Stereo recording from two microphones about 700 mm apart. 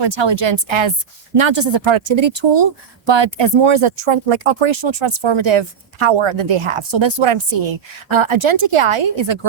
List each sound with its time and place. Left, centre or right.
0.0 s speech: right